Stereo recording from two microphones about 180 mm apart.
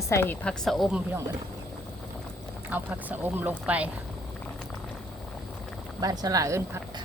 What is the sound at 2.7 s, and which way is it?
Speech, 10° right (ahead or behind).